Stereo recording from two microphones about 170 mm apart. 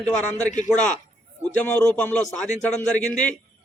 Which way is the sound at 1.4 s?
10° left (ahead or behind).